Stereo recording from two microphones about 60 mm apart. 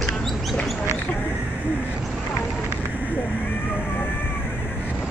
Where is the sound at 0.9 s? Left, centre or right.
Left.